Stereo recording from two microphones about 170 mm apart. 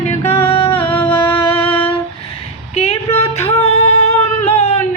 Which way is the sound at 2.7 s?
40° left (ahead or behind).